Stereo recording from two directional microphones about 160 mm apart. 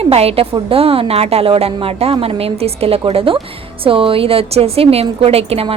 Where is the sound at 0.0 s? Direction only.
40° right (ahead or behind).